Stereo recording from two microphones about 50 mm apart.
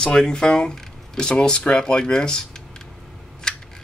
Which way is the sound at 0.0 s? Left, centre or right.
Centre.